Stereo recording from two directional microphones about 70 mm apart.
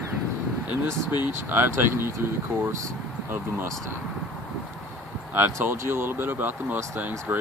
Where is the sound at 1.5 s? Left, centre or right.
Right.